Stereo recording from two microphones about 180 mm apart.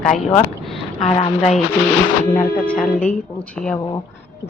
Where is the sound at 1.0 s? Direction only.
35° left (ahead or behind).